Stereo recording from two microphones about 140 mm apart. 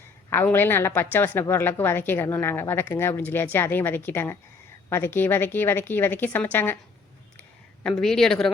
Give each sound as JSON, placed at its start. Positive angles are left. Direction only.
{"t": 0.3, "sound": "a woman's voice", "side_deg": 15}
{"t": 8.0, "sound": "speech", "side_deg": 5}